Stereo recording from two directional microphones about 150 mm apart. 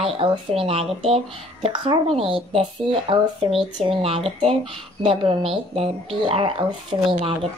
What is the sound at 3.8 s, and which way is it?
Speech, 40° right (ahead or behind).